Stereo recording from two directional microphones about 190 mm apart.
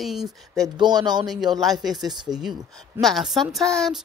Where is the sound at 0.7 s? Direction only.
20° right (ahead or behind).